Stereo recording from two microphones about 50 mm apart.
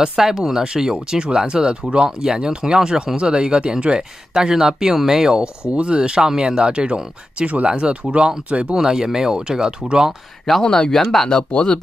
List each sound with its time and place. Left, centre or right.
0.0 s speech: centre
8.7 s speech: centre
10.6 s speech: centre